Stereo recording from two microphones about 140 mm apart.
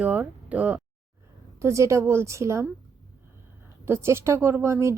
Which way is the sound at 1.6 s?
20° right (ahead or behind).